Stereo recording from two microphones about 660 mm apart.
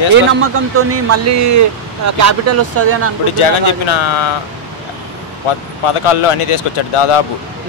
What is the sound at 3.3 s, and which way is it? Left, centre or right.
Speech, left.